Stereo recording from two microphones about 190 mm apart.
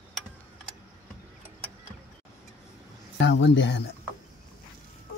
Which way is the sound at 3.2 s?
70° left (ahead or behind).